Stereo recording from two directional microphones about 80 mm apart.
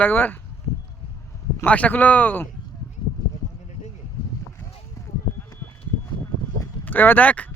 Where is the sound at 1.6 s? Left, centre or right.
Centre.